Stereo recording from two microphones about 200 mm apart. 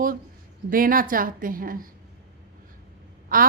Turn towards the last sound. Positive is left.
turn(degrees=-45)  # may be behind; listen again after turning